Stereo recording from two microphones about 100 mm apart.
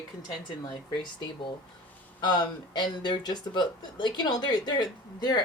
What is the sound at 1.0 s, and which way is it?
Speech, 50° left (ahead or behind).